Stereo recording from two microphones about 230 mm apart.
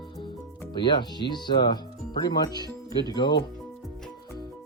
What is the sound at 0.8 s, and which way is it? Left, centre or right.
Speech, centre.